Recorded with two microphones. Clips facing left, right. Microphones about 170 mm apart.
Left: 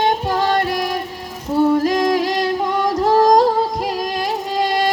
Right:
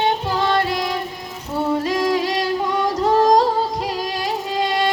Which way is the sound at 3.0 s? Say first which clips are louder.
Left 2 dB; 50° left (ahead or behind).